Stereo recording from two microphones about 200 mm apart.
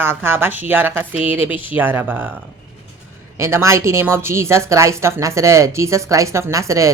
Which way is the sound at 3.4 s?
15° right (ahead or behind).